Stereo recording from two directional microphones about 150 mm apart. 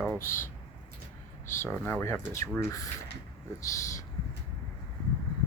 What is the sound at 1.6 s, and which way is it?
Speech, 15° left (ahead or behind).